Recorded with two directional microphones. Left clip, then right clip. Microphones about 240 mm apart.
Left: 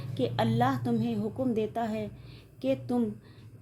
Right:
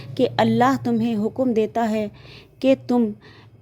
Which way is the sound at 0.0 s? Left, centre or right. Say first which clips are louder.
Right 10 dB; right.